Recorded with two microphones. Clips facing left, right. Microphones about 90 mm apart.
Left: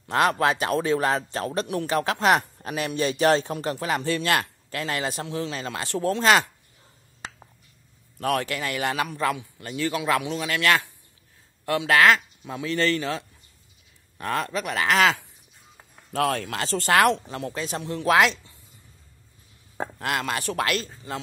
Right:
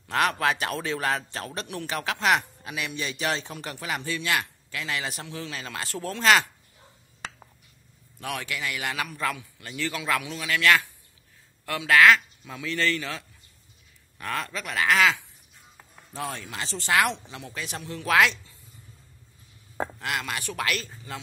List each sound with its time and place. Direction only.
0.1 s a man's voice: 30° left (ahead or behind)
8.2 s a man's voice: 45° left (ahead or behind); by 14.9 s 25° left (ahead or behind)
14.9 s speech: 40° left (ahead or behind)
16.1 s speech: 70° left (ahead or behind)
16.8 s speech: 50° left (ahead or behind)
17.4 s a man's voice: 35° left (ahead or behind)
20.0 s a man's voice: 40° left (ahead or behind)